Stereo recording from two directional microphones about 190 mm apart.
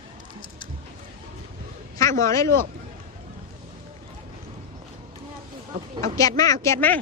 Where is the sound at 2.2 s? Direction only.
15° left (ahead or behind).